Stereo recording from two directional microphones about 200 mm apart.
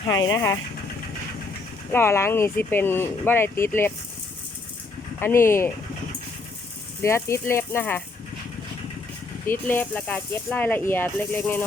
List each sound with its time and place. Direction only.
0.1 s speech: 20° left (ahead or behind)
1.9 s speech: 10° left (ahead or behind)
5.2 s speech: 10° left (ahead or behind)
7.0 s speech: 15° left (ahead or behind)
9.5 s speech: 10° left (ahead or behind)